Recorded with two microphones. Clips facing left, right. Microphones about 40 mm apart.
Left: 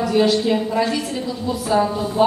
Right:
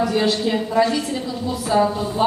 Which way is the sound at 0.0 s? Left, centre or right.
Centre.